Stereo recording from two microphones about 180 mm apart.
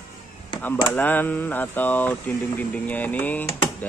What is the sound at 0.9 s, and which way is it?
Speech, 10° left (ahead or behind).